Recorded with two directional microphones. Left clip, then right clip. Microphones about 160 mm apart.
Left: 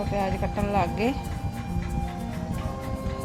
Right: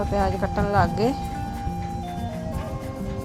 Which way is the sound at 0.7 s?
35° right (ahead or behind).